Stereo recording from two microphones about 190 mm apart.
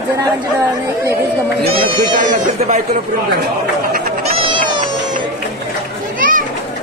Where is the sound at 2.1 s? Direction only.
40° right (ahead or behind).